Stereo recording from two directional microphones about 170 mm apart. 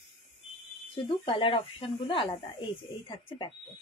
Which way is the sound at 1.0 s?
30° left (ahead or behind).